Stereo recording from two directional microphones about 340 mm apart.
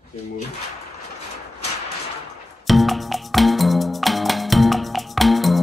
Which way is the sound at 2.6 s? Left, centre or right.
Centre.